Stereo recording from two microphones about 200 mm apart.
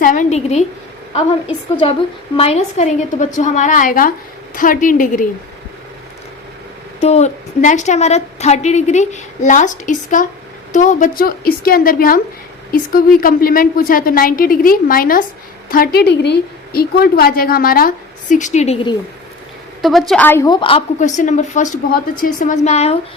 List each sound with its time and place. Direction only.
0.0 s a woman's voice: 40° left (ahead or behind)
1.7 s a woman's voice: 25° left (ahead or behind); by 5.3 s 40° left (ahead or behind)
7.0 s a woman's voice: 35° left (ahead or behind)
19.8 s a woman's voice: centre (ahead or behind); by 23.0 s 30° left (ahead or behind)